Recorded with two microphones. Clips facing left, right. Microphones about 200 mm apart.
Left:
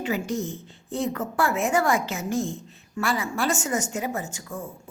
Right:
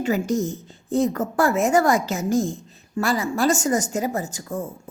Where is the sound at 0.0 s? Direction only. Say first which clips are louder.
Right 5 dB; 45° right (ahead or behind).